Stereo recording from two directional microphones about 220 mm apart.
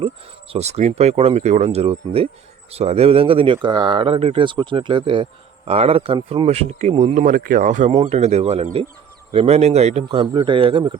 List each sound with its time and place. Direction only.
0.5 s speech: 30° right (ahead or behind)